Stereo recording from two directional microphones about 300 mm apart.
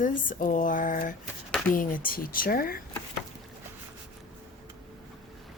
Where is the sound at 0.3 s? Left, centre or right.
Left.